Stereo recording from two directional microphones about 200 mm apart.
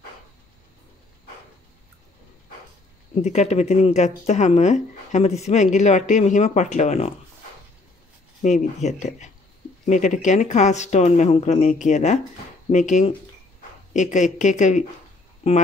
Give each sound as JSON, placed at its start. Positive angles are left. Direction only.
{"t": 3.2, "sound": "speech", "side_deg": 35}
{"t": 8.4, "sound": "speech", "side_deg": 35}